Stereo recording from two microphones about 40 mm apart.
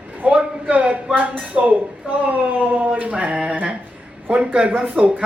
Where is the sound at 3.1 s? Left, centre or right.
Right.